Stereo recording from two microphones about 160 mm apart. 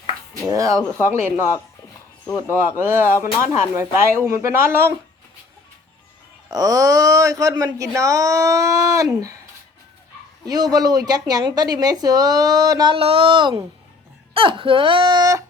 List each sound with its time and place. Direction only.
0.4 s a woman's voice: 20° right (ahead or behind)
6.5 s a woman's voice: 20° right (ahead or behind)
10.4 s a woman's voice: 25° right (ahead or behind)